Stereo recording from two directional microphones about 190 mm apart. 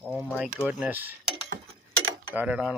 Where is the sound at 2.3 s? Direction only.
5° right (ahead or behind).